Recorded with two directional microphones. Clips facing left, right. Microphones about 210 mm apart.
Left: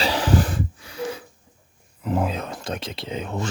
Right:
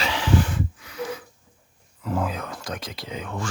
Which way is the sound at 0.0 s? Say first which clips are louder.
Left 2 dB; 40° left (ahead or behind).